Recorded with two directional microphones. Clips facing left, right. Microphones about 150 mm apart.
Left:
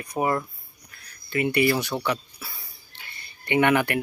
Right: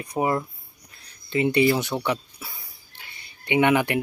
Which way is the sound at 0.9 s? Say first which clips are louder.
Right 4 dB; 25° right (ahead or behind).